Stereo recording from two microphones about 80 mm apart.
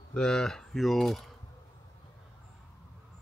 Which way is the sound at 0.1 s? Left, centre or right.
Centre.